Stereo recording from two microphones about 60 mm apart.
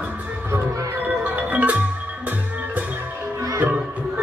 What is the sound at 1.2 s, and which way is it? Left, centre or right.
Music, right.